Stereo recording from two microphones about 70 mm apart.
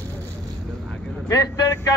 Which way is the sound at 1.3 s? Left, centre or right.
Left.